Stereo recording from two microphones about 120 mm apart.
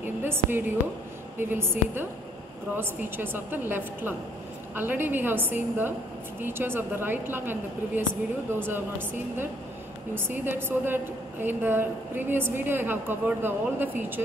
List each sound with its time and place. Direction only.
0.2 s a woman's voice: 20° right (ahead or behind)
10.1 s a woman's voice: 20° right (ahead or behind)